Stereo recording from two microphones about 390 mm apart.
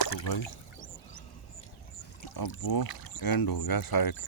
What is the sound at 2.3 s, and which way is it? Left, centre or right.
Speech, left.